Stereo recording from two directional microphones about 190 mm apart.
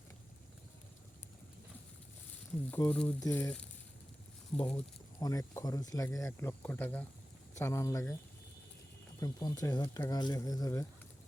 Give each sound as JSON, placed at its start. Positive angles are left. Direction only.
{"t": 2.6, "sound": "speech", "side_deg": 10}
{"t": 5.2, "sound": "speech", "side_deg": 20}
{"t": 9.2, "sound": "speech", "side_deg": 20}